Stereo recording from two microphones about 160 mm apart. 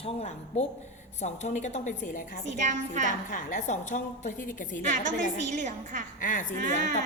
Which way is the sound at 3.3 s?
50° left (ahead or behind).